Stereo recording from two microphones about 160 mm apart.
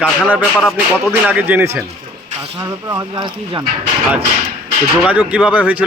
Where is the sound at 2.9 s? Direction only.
30° right (ahead or behind).